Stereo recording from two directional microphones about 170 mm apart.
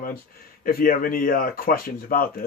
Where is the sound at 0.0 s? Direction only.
60° left (ahead or behind).